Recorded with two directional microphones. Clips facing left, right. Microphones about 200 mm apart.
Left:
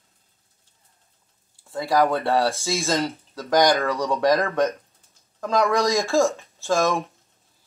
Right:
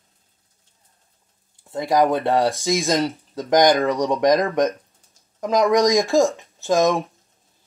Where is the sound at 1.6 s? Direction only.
20° right (ahead or behind).